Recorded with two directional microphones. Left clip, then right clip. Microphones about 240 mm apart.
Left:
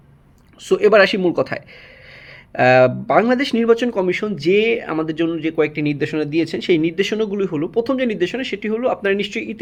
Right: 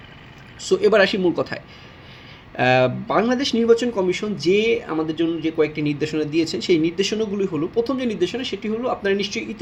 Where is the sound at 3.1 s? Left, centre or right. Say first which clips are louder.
Left 4 dB; left.